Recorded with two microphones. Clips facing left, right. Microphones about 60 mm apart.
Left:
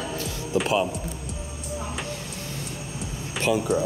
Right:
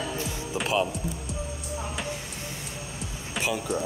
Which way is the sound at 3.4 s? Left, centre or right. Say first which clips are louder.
Left 6 dB; centre.